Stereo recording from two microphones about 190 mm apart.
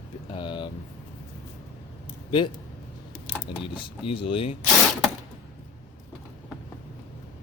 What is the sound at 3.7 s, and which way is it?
Speech, 30° left (ahead or behind).